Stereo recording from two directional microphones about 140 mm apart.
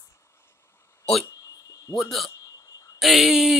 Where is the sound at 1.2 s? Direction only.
25° left (ahead or behind).